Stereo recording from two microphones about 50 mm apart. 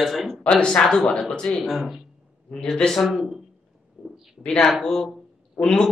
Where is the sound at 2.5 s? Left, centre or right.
Centre.